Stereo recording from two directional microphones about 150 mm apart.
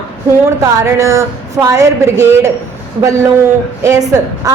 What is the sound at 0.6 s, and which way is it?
A woman's voice, 20° right (ahead or behind).